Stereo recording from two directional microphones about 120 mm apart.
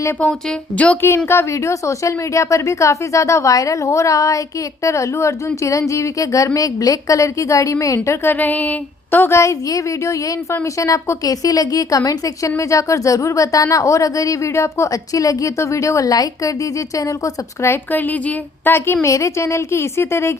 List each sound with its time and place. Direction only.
0.2 s speech: 10° left (ahead or behind)
1.3 s a woman's voice: 25° left (ahead or behind)